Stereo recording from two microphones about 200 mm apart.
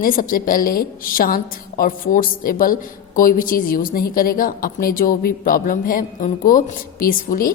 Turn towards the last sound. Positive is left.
turn(degrees=45)  # may be behind; listen again after turning